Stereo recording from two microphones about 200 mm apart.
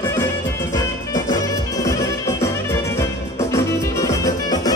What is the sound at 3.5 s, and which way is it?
Music, 15° left (ahead or behind).